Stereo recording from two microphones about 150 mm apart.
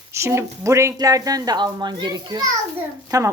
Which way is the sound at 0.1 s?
20° right (ahead or behind).